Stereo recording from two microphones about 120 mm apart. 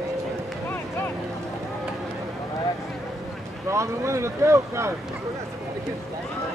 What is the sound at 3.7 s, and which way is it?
Speech, 25° right (ahead or behind).